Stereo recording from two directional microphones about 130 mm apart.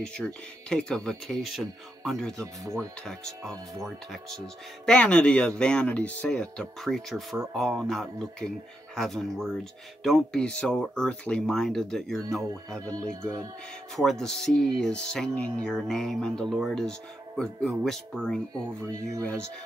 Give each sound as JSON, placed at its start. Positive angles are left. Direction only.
{"t": 0.0, "sound": "speech", "side_deg": 5}
{"t": 2.4, "sound": "speech", "side_deg": -25}
{"t": 3.1, "sound": "speech", "side_deg": 5}
{"t": 13.9, "sound": "speech", "side_deg": 5}
{"t": 18.8, "sound": "speech", "side_deg": -25}